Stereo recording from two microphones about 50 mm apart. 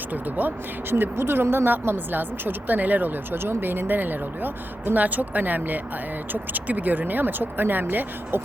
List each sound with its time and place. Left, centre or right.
0.1 s speech: right